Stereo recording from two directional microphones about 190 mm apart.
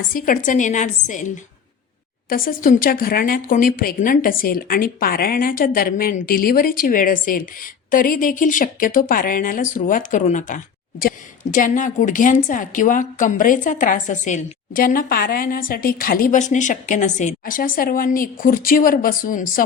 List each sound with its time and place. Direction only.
0.1 s a woman's voice: 45° left (ahead or behind)
2.3 s a woman's voice: 50° left (ahead or behind)